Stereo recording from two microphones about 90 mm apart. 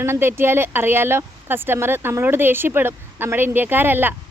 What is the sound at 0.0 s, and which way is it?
Speech, 25° right (ahead or behind).